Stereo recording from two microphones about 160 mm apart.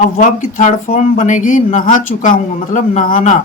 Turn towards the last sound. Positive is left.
turn(degrees=55)  # may be behind; listen again after turning